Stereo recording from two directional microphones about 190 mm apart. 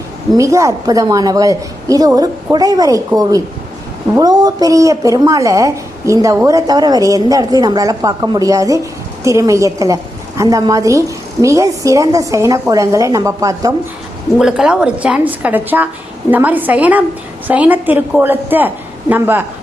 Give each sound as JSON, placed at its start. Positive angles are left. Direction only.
{"t": 0.3, "sound": "a woman's voice", "side_deg": -15}
{"t": 14.3, "sound": "a woman's voice", "side_deg": -5}